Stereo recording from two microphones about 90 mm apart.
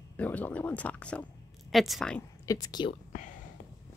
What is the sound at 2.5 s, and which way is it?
Speech, 45° left (ahead or behind).